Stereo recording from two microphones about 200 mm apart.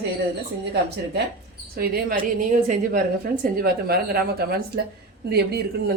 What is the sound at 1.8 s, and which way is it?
A woman's voice, 45° right (ahead or behind).